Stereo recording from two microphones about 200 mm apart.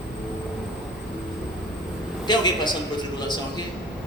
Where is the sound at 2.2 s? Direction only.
20° left (ahead or behind).